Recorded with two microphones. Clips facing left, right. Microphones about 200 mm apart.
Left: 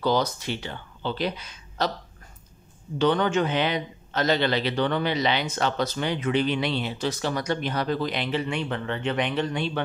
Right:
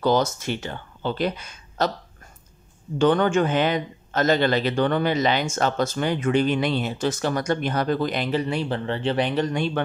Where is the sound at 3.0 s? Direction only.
50° right (ahead or behind).